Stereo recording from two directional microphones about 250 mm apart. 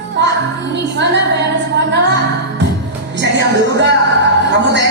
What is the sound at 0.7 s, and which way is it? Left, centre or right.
Music, right.